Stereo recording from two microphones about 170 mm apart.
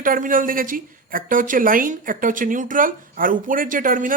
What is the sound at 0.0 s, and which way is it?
A woman's voice, 55° right (ahead or behind).